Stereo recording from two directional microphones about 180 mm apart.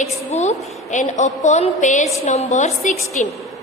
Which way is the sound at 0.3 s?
40° left (ahead or behind).